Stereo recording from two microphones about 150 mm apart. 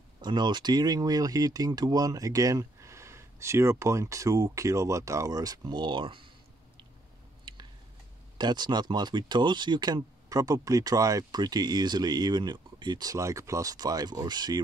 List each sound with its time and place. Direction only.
0.2 s speech: 30° right (ahead or behind)
7.5 s tick-tock: 30° right (ahead or behind)
8.4 s speech: 30° right (ahead or behind)